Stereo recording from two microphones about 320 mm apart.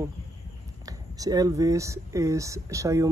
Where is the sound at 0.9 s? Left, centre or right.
Centre.